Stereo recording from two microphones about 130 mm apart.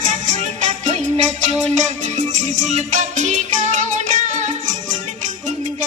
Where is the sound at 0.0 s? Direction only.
70° right (ahead or behind).